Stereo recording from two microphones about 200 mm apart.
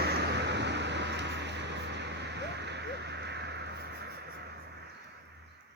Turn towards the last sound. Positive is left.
turn(degrees=-55)  # may be behind; listen again after turning